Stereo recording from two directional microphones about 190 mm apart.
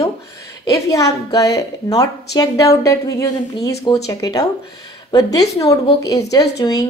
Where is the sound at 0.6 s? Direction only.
15° left (ahead or behind).